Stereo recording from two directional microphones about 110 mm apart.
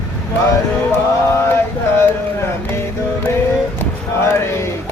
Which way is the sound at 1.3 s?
20° left (ahead or behind).